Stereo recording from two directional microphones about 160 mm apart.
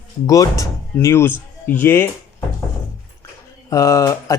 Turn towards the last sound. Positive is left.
turn(degrees=20)  # may be behind; listen again after turning